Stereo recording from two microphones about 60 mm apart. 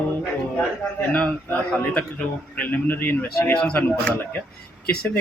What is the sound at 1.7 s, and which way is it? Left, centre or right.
A man's voice, centre.